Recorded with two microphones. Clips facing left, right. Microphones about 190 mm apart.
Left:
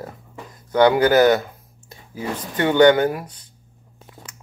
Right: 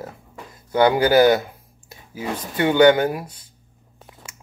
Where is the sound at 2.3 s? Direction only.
10° right (ahead or behind).